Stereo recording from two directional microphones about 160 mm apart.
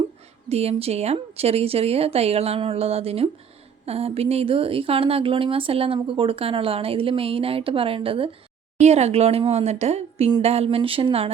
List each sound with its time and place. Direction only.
0.4 s speech: 40° right (ahead or behind)